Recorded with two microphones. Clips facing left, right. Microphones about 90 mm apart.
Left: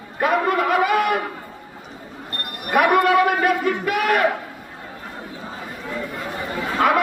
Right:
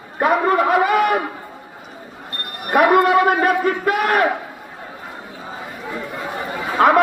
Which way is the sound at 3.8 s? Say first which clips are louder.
Right 2 dB; 35° right (ahead or behind).